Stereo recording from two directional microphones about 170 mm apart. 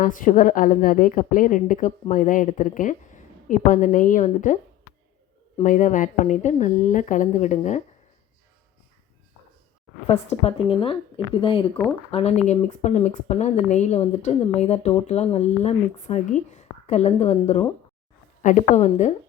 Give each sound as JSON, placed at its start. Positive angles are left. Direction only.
{"t": 0.0, "sound": "a woman's voice", "side_deg": 50}
{"t": 5.6, "sound": "a woman's voice", "side_deg": 50}
{"t": 10.1, "sound": "a woman's voice", "side_deg": 35}